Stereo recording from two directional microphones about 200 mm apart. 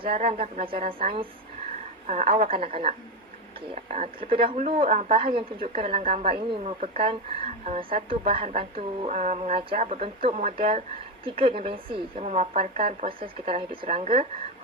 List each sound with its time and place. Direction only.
0.1 s a woman's voice: 35° right (ahead or behind)